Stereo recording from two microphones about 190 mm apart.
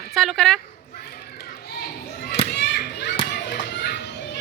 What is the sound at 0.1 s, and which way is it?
Speech, centre (ahead or behind).